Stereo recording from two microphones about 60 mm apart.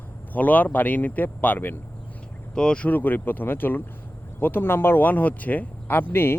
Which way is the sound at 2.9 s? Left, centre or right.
Left.